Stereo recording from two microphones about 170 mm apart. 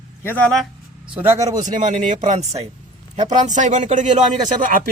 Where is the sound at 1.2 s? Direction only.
15° right (ahead or behind).